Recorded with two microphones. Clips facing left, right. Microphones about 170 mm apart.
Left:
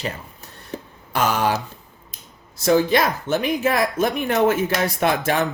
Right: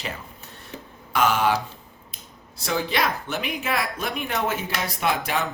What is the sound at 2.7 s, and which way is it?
Speech, 45° left (ahead or behind).